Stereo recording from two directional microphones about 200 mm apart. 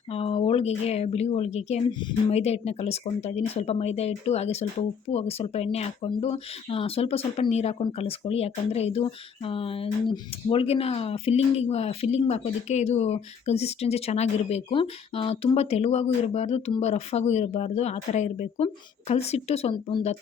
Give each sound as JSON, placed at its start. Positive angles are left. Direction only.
{"t": 0.1, "sound": "speech", "side_deg": 30}